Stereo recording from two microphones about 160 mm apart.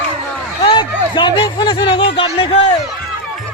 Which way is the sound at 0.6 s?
30° left (ahead or behind).